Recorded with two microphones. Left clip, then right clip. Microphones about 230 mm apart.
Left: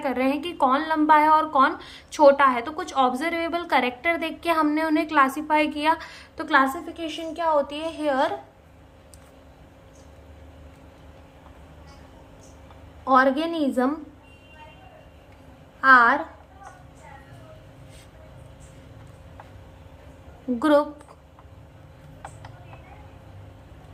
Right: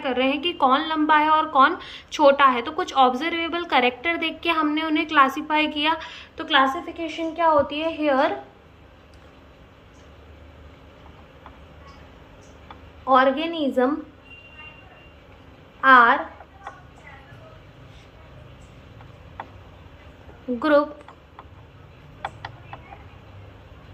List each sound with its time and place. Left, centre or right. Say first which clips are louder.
0.0 s a woman's voice: right 2 dB; centre
13.1 s a woman's voice: right 1 dB; left
15.8 s a woman's voice: right 2 dB; left
20.6 s a woman's voice: right 1 dB; left